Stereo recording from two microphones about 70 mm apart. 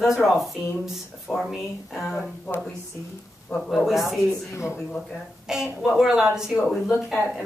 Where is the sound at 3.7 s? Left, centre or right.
Centre.